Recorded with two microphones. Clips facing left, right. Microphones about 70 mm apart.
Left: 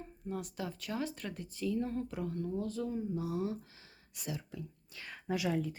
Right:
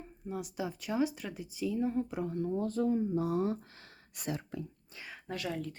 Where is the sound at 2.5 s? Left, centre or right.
Right.